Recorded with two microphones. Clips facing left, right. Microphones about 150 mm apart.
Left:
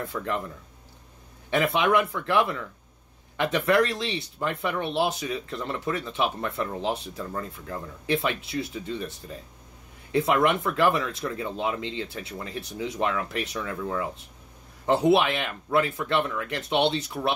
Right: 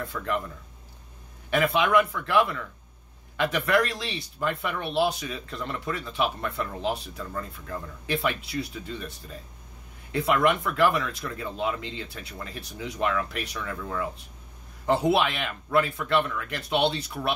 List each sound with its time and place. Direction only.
0.0 s speech: 25° left (ahead or behind)
1.5 s speech: 25° left (ahead or behind)
10.1 s speech: 25° left (ahead or behind)